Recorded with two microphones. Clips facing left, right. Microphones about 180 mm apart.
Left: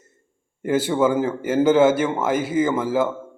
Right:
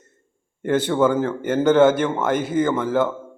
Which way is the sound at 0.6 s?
10° left (ahead or behind).